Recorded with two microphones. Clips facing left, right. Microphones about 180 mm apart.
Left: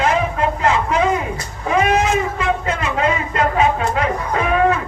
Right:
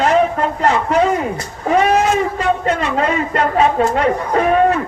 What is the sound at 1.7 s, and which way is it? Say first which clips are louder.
Cat: right 3 dB; 35° right (ahead or behind).